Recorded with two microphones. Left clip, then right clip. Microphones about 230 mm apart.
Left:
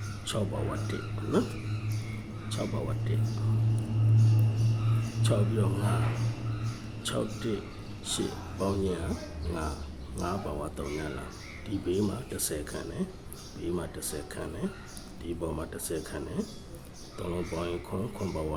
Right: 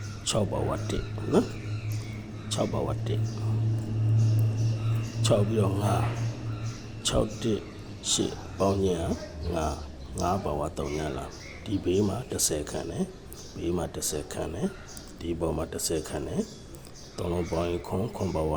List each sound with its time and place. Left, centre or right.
0.3 s speech: centre
2.5 s speech: centre
5.2 s speech: centre
7.0 s speech: centre
10.2 s speech: centre